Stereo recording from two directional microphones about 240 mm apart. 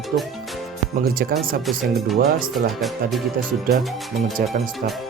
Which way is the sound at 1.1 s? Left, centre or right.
Right.